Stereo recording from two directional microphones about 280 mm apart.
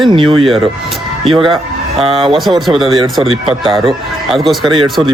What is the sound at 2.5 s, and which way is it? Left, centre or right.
Speech, centre.